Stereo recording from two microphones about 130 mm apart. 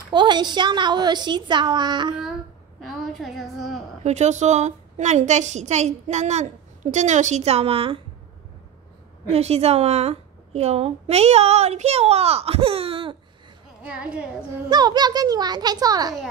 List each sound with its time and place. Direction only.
0.1 s a woman's voice: 35° right (ahead or behind)
2.8 s a woman's voice: centre (ahead or behind)
4.0 s a woman's voice: 65° right (ahead or behind); by 8.0 s 45° right (ahead or behind)
9.3 s a woman's voice: 55° right (ahead or behind)
13.8 s a woman's voice: 10° right (ahead or behind)
14.7 s a woman's voice: 35° right (ahead or behind)